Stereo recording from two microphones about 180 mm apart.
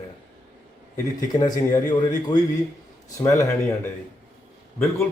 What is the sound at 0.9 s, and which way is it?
A man's voice, 20° left (ahead or behind).